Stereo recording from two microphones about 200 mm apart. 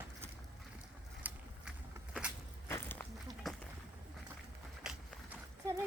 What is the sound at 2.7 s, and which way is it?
Walk, 10° left (ahead or behind).